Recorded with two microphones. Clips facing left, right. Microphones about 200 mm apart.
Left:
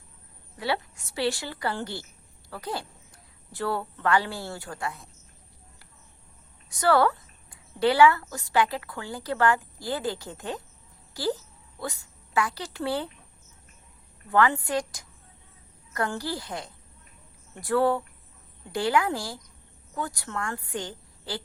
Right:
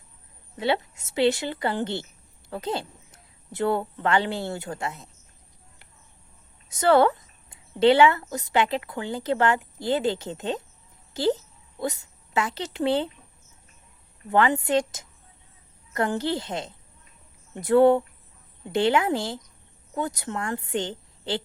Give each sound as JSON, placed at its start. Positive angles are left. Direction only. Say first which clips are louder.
{"t": 0.5, "sound": "a woman's voice", "louder": "right 4 dB", "side_deg": -20}
{"t": 6.7, "sound": "a woman's voice", "louder": "right 3 dB", "side_deg": -20}
{"t": 14.3, "sound": "a woman's voice", "louder": "right 2 dB", "side_deg": -20}